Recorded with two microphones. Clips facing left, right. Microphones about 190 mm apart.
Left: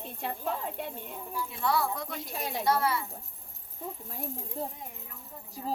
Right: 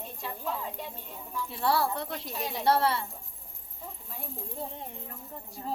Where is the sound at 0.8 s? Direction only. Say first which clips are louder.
Left 3 dB; 55° left (ahead or behind).